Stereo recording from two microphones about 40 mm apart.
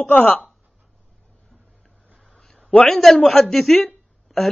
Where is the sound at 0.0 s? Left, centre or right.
Left.